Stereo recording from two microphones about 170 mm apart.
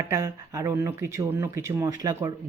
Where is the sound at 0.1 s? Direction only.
20° right (ahead or behind).